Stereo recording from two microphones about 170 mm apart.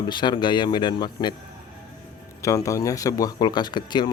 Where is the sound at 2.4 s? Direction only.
20° left (ahead or behind).